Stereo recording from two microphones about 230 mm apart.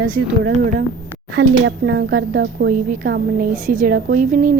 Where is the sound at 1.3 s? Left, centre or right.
Right.